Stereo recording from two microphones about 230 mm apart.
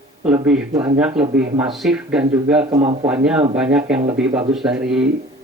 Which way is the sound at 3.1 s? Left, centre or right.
Centre.